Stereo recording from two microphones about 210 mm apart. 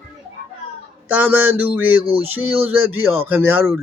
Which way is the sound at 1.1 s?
10° right (ahead or behind).